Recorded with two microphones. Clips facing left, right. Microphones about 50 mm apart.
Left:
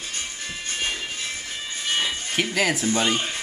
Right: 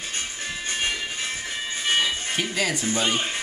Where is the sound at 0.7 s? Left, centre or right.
Centre.